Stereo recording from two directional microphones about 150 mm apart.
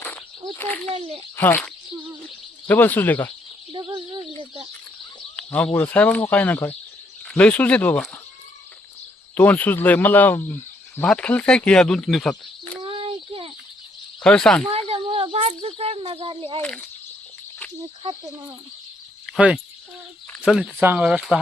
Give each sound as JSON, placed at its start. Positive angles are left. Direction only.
{"t": 0.9, "sound": "a child's voice", "side_deg": -40}
{"t": 1.4, "sound": "speech", "side_deg": 10}
{"t": 3.7, "sound": "speech", "side_deg": -30}
{"t": 5.4, "sound": "speech", "side_deg": 10}
{"t": 9.3, "sound": "speech", "side_deg": 10}
{"t": 12.8, "sound": "a sound", "side_deg": -35}
{"t": 14.2, "sound": "speech", "side_deg": 5}
{"t": 14.7, "sound": "speech", "side_deg": -40}
{"t": 16.6, "sound": "speech", "side_deg": 5}
{"t": 20.5, "sound": "speech", "side_deg": -5}